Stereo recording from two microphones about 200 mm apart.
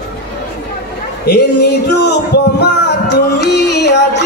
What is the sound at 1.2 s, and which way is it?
Speech, 55° left (ahead or behind).